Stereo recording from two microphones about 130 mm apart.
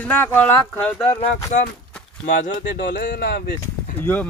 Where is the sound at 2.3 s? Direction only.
80° left.